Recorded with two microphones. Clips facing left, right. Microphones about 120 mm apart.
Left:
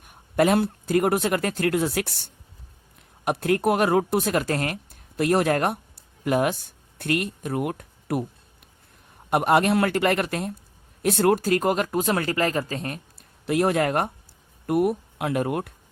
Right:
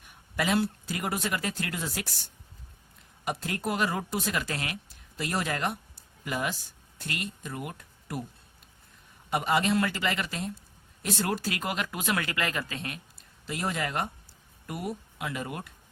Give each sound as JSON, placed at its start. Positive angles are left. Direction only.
{"t": 0.0, "sound": "speech", "side_deg": 50}
{"t": 9.3, "sound": "speech", "side_deg": 55}
{"t": 13.4, "sound": "speech", "side_deg": 60}